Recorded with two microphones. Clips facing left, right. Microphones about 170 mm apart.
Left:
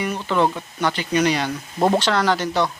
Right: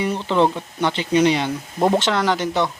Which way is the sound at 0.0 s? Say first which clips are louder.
Right 2 dB; 25° right (ahead or behind).